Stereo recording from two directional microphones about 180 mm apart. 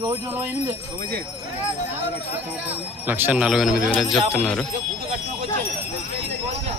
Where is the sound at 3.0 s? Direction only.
10° right (ahead or behind).